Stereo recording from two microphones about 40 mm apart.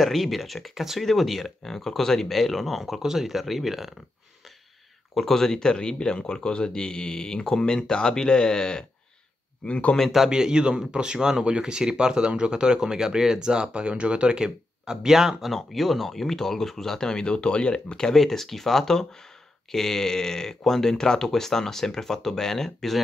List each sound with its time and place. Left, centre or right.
0.0 s speech: centre
5.1 s speech: centre
9.7 s speech: left
10.3 s speech: centre
15.5 s speech: centre; by 17.9 s left
17.9 s speech: centre